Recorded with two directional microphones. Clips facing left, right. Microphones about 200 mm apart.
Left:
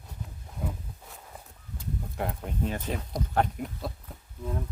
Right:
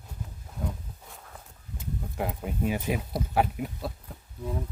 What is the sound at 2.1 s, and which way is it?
Speech, 5° right (ahead or behind).